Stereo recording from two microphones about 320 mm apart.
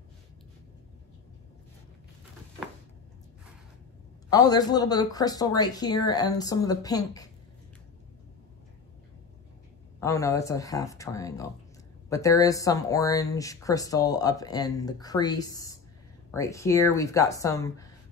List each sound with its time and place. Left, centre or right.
4.3 s speech: centre
9.9 s speech: centre